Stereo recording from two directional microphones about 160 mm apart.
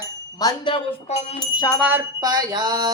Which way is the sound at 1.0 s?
40° left (ahead or behind).